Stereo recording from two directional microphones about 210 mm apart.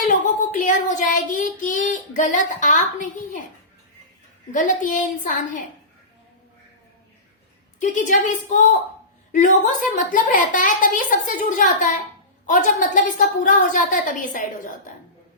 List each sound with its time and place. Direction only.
0.1 s child singing: 35° left (ahead or behind)
4.5 s a woman's voice: 40° left (ahead or behind)
7.8 s a woman's voice: 35° left (ahead or behind)